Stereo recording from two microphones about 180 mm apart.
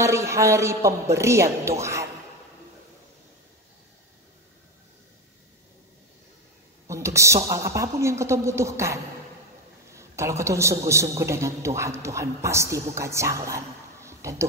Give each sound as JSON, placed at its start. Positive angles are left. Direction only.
{"t": 0.0, "sound": "a man's voice", "side_deg": -15}
{"t": 6.9, "sound": "a sound", "side_deg": -15}
{"t": 7.4, "sound": "a man's voice", "side_deg": -15}